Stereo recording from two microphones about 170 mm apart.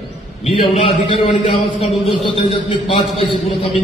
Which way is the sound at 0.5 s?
35° left (ahead or behind).